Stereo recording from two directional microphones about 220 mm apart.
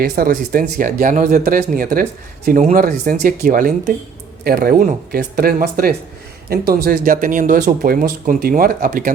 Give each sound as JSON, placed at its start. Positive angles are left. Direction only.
{"t": 0.0, "sound": "speech", "side_deg": -40}